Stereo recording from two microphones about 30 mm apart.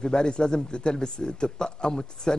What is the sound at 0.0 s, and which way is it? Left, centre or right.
Speech, left.